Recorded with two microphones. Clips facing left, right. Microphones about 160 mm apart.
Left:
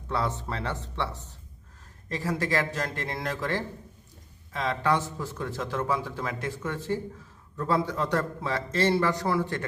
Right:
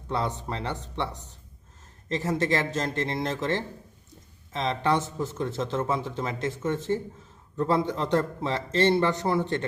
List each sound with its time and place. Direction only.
0.1 s a man's voice: 20° right (ahead or behind)